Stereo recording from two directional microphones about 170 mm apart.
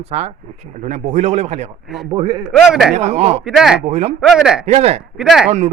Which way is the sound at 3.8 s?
40° right (ahead or behind).